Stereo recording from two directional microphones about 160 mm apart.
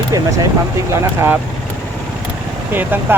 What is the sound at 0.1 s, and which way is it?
Speech, 20° right (ahead or behind).